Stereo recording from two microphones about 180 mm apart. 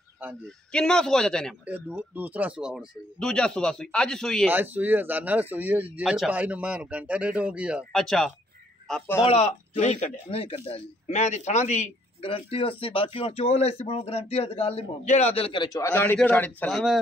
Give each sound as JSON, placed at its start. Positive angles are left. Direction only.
{"t": 0.7, "sound": "speech", "side_deg": 5}
{"t": 1.7, "sound": "speech", "side_deg": -10}
{"t": 4.5, "sound": "speech", "side_deg": -10}
{"t": 9.2, "sound": "speech", "side_deg": 35}